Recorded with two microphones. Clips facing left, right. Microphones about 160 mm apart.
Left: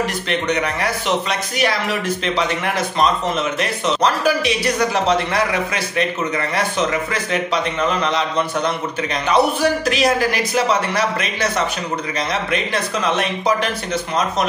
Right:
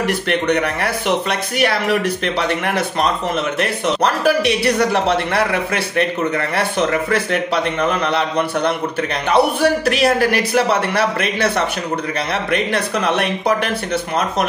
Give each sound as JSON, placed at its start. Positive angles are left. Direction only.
{"t": 0.0, "sound": "a man's voice", "side_deg": -60}